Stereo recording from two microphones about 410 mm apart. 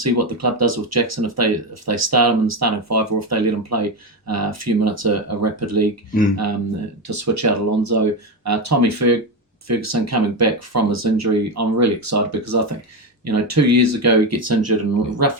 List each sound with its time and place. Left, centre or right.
0.0 s speech: right